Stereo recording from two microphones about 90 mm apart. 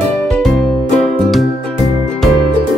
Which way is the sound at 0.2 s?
5° left (ahead or behind).